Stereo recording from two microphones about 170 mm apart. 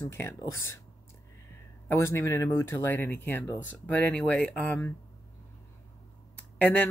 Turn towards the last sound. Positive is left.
turn(degrees=10)  # may be behind; listen again after turning